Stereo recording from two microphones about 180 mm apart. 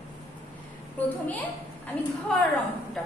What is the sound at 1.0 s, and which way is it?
Speech, 10° left (ahead or behind).